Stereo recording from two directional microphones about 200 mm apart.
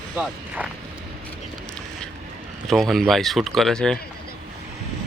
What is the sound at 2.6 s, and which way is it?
Speech, centre (ahead or behind).